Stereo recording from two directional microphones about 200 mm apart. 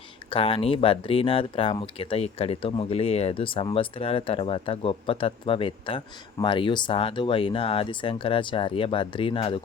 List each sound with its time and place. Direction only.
0.3 s speech: 30° left (ahead or behind)